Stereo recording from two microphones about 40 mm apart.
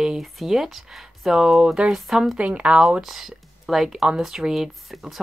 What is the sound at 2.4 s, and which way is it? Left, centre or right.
Speech, right.